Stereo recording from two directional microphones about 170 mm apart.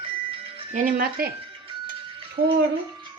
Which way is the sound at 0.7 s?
55° right (ahead or behind).